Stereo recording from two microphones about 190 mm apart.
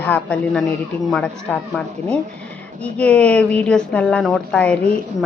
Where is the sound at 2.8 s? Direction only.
5° left (ahead or behind).